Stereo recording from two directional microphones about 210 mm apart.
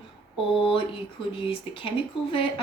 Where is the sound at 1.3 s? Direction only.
25° left (ahead or behind).